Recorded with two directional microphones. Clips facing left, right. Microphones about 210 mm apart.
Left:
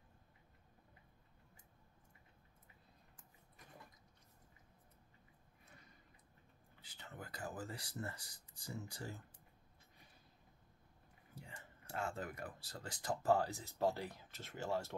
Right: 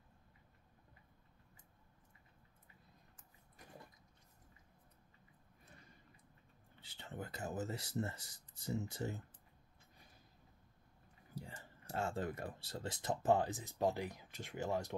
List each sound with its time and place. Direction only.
6.8 s speech: 25° right (ahead or behind)
11.9 s speech: 30° right (ahead or behind)